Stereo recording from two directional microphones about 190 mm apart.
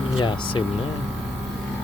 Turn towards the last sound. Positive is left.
turn(degrees=25)  # may be behind; listen again after turning